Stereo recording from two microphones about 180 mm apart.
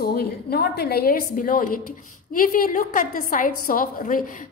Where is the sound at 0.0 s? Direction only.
60° left (ahead or behind).